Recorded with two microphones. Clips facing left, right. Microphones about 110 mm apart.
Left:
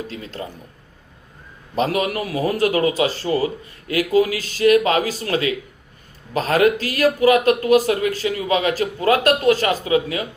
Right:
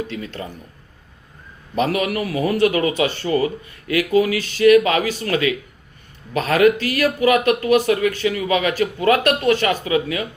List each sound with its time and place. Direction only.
0.1 s speech: 35° left (ahead or behind)
1.7 s speech: 35° left (ahead or behind)